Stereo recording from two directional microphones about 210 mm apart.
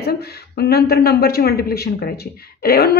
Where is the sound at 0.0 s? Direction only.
50° left (ahead or behind).